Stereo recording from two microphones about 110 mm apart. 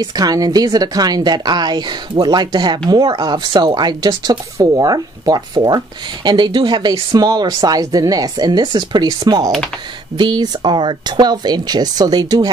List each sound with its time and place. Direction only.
0.0 s speech: 35° right (ahead or behind)